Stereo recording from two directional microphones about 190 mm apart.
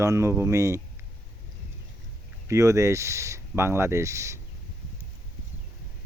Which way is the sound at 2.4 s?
15° right (ahead or behind).